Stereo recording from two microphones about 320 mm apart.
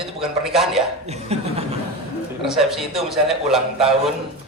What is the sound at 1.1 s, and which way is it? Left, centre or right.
Speech, centre.